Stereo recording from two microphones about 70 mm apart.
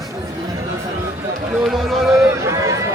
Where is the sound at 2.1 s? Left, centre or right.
Right.